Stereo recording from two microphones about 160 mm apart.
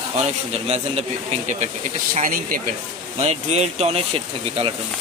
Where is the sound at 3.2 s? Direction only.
45° right (ahead or behind).